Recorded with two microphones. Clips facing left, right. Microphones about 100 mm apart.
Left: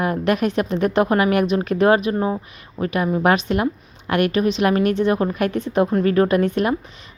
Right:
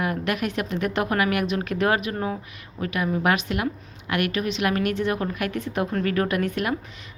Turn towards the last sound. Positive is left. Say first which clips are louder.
# left 7 dB
turn(degrees=25)  # may be behind; listen again after turning